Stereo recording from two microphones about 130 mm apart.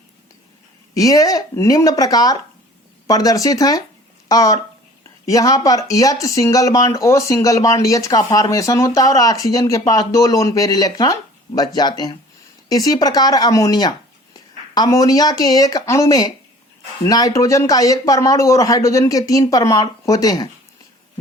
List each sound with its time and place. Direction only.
0.9 s speech: 30° left (ahead or behind)